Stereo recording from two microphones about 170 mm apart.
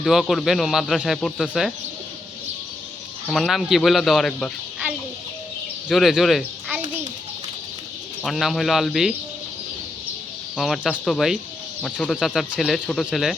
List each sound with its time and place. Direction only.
0.0 s speech: centre (ahead or behind)
3.2 s speech: centre (ahead or behind)
8.2 s speech: centre (ahead or behind)
10.6 s speech: centre (ahead or behind)